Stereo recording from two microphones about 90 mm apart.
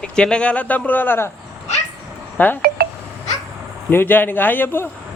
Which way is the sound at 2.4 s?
20° left (ahead or behind).